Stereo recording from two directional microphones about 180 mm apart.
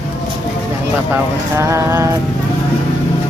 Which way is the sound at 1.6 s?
15° right (ahead or behind).